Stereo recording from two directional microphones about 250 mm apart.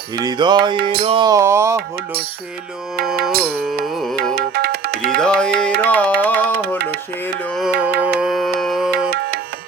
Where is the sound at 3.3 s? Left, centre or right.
Right.